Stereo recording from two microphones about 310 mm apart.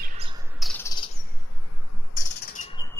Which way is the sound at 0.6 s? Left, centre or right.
Centre.